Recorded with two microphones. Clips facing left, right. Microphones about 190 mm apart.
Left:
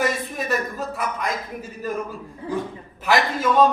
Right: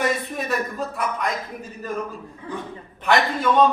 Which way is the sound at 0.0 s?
Centre (ahead or behind).